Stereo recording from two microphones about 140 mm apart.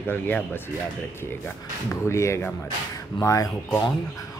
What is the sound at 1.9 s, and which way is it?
Speech, 20° left (ahead or behind).